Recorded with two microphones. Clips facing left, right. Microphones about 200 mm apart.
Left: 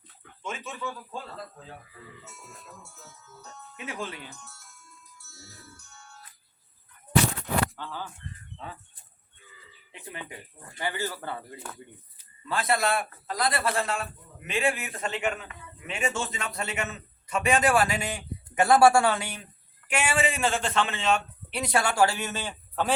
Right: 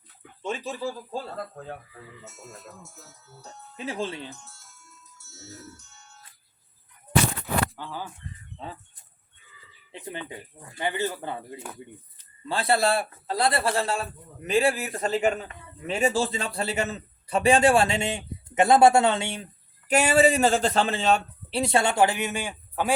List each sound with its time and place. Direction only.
0.4 s a man's voice: 35° right (ahead or behind)
1.4 s speech: 55° right (ahead or behind)
3.0 s a man's voice: 35° right (ahead or behind)
5.1 s music: 25° right (ahead or behind)
7.8 s speech: 15° right (ahead or behind)
8.5 s speech: 30° right (ahead or behind)
10.1 s speech: 30° right (ahead or behind)
12.5 s a man's voice: 30° right (ahead or behind)
19.9 s a man's voice: 40° right (ahead or behind); by 23.0 s 10° right (ahead or behind)